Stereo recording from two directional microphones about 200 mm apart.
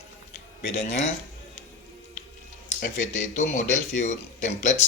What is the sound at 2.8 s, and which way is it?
Speech, 35° left (ahead or behind).